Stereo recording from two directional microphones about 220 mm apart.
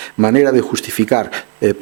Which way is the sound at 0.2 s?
15° right (ahead or behind).